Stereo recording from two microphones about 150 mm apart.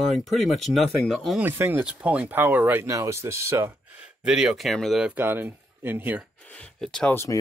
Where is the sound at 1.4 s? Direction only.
15° right (ahead or behind).